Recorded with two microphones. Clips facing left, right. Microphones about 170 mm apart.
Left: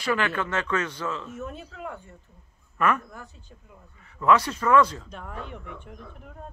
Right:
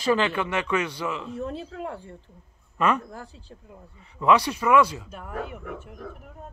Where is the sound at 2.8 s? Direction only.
20° right (ahead or behind).